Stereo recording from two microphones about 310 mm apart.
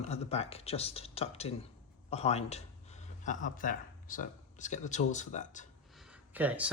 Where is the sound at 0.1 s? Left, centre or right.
Centre.